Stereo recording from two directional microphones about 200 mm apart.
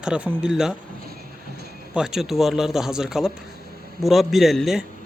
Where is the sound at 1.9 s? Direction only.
5° right (ahead or behind).